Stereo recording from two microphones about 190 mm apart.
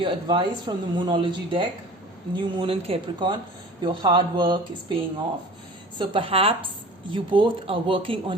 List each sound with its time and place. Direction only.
0.0 s speech: 25° right (ahead or behind)
6.0 s speech: 30° right (ahead or behind)